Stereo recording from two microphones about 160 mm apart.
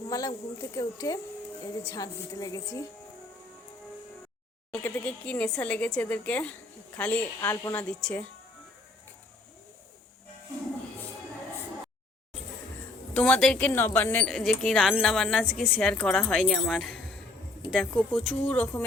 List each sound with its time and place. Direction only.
0.1 s speech: 20° left (ahead or behind)
4.7 s speech: 10° left (ahead or behind)
7.4 s speech: 20° left (ahead or behind)
13.1 s speech: 5° left (ahead or behind)